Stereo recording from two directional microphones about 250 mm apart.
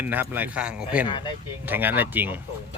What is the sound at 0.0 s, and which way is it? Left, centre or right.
A man's voice, centre.